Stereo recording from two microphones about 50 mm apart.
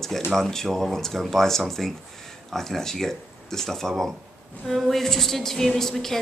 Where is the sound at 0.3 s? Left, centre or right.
Centre.